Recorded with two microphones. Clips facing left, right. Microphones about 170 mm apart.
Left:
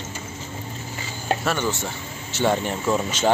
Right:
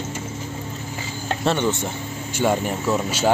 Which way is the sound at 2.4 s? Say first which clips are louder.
Right 1 dB; 5° right (ahead or behind).